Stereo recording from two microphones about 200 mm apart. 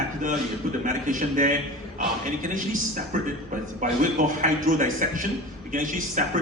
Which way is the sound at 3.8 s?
40° right (ahead or behind).